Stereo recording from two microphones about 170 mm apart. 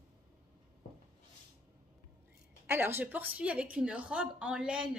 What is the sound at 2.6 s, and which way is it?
A woman's voice, 10° right (ahead or behind).